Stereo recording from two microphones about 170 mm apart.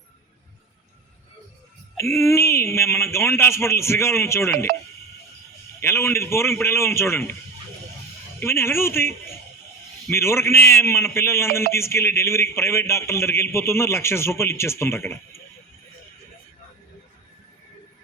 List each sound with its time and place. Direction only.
2.0 s a man's voice: 15° left (ahead or behind)
5.8 s a man's voice: 15° left (ahead or behind)
8.4 s a man's voice: 15° left (ahead or behind)